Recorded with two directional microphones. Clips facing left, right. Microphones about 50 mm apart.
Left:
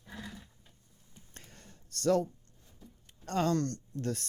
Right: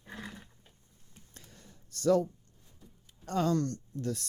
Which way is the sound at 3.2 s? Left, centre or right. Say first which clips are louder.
Right 1 dB; left.